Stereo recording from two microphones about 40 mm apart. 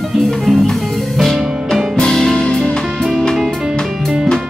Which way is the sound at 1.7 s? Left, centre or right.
Centre.